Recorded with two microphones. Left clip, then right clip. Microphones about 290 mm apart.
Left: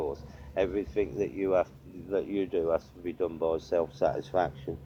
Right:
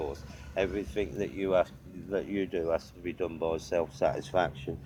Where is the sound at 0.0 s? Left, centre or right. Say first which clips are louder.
Left 3 dB; right.